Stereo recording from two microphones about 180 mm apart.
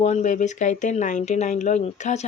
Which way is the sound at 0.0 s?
40° left (ahead or behind).